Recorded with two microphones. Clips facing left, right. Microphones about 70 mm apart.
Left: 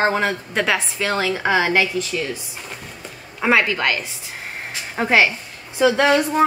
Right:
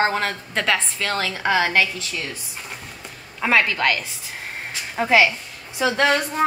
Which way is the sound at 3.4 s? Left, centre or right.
Centre.